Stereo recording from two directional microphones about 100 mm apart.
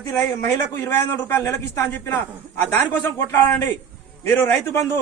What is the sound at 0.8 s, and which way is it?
A man's voice, 20° left (ahead or behind).